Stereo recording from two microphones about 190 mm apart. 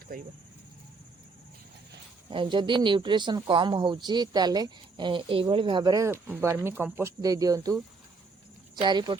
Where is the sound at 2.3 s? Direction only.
25° right (ahead or behind).